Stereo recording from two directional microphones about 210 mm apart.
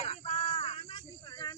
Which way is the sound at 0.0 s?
30° left (ahead or behind).